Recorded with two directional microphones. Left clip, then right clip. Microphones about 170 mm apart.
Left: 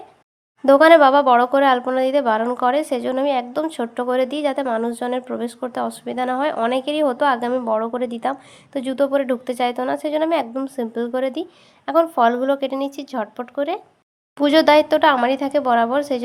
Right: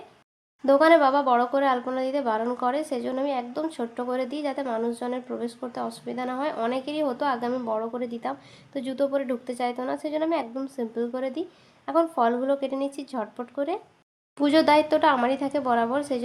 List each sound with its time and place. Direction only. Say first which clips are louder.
0.6 s speech: left 7 dB; 35° left (ahead or behind)